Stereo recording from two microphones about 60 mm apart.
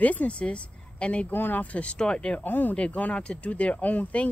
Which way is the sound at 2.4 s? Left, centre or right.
Left.